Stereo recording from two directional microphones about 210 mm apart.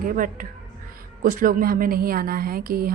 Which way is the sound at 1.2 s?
40° right (ahead or behind).